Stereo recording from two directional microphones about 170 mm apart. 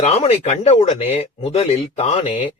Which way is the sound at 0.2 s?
35° left (ahead or behind).